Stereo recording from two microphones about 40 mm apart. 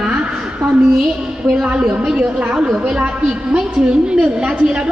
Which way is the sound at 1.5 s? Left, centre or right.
Centre.